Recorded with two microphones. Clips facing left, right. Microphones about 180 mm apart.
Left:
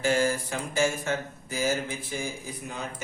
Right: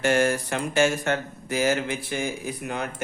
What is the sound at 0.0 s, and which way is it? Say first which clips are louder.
Speech: right 3 dB; 75° right (ahead or behind).